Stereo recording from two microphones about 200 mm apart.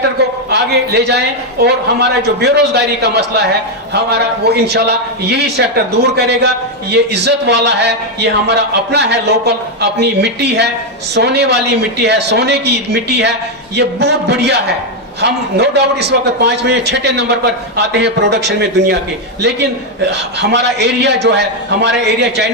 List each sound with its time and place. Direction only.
0.5 s a man's voice: 55° right (ahead or behind)